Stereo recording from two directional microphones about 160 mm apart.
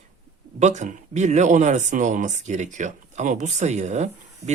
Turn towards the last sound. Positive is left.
turn(degrees=-45)  # may be behind; listen again after turning